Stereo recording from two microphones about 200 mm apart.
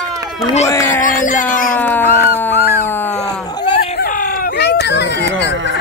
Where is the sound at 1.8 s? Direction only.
10° left (ahead or behind).